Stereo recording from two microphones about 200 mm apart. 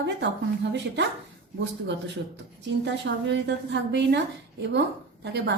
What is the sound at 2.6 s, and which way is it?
A woman's voice, 60° right (ahead or behind).